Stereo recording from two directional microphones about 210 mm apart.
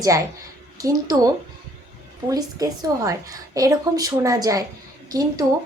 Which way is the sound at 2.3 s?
15° right (ahead or behind).